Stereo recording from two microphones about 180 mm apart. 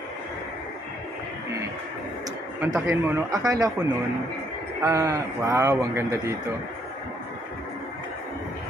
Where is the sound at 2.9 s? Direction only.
15° right (ahead or behind).